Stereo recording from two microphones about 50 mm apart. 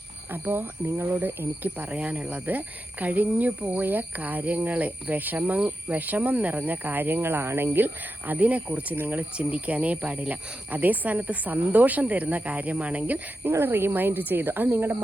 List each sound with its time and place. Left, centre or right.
0.4 s speech: right
1.8 s speech: right
8.3 s speech: right
13.5 s speech: right